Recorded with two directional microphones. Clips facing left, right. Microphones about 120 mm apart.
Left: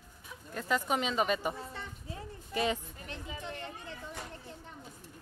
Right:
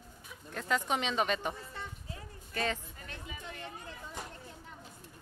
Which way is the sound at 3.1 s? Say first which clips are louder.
Left 4 dB; 30° left (ahead or behind).